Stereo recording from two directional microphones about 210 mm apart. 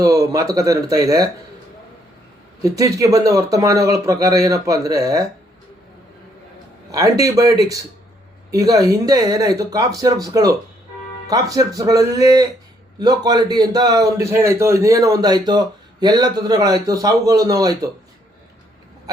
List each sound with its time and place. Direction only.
0.0 s a man's voice: 15° right (ahead or behind)
2.6 s a man's voice: 15° right (ahead or behind)
6.9 s a man's voice: 15° right (ahead or behind)